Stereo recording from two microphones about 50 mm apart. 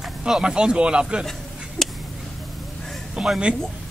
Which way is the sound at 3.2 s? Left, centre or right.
Centre.